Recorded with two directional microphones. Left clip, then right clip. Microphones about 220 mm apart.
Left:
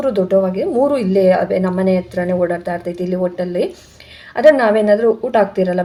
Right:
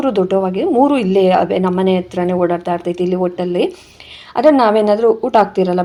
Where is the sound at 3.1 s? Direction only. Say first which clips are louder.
Even; 30° right (ahead or behind).